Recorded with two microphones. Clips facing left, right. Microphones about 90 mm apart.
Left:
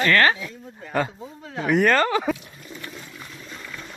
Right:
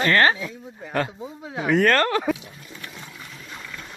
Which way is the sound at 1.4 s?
10° right (ahead or behind).